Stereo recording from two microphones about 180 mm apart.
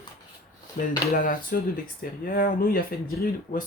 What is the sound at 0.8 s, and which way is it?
Speech, 50° left (ahead or behind).